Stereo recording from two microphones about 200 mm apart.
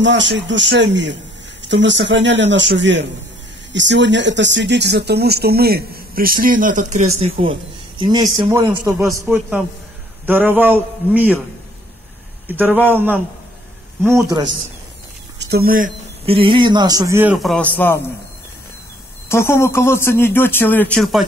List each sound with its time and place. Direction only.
0.0 s a man's voice: 65° right (ahead or behind); by 11.3 s 10° right (ahead or behind)
12.4 s a man's voice: 10° right (ahead or behind)
15.4 s speech: 50° right (ahead or behind)
16.3 s a man's voice: 25° right (ahead or behind); by 18.0 s 10° left (ahead or behind)
19.2 s speech: 10° left (ahead or behind)